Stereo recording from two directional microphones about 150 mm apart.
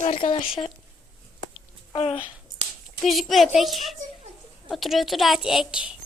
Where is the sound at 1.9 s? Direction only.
40° left (ahead or behind).